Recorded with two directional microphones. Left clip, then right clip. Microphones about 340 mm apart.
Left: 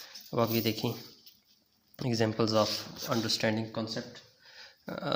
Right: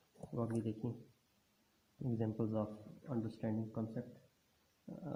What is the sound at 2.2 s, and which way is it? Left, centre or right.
Speech, left.